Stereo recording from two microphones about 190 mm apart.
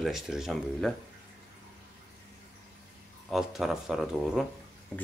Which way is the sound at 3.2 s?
Centre (ahead or behind).